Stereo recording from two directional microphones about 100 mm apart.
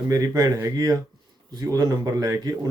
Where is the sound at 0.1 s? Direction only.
40° right (ahead or behind).